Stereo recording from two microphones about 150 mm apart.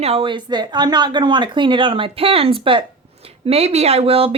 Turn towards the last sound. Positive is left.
turn(degrees=-40)  # may be behind; listen again after turning